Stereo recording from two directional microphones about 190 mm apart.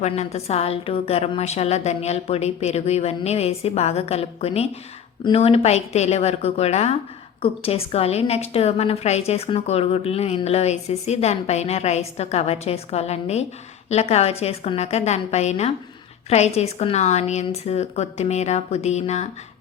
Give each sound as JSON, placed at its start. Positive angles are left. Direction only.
{"t": 0.0, "sound": "a woman's voice", "side_deg": 35}